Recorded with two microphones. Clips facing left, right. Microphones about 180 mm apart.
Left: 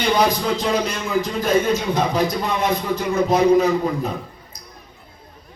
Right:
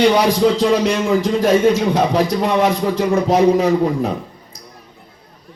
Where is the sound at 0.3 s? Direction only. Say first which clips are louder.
Right 7 dB; 80° right.